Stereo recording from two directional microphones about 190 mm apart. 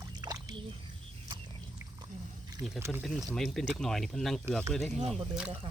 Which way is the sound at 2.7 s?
15° right (ahead or behind).